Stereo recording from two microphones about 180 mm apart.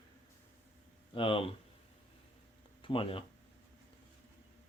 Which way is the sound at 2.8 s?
30° left (ahead or behind).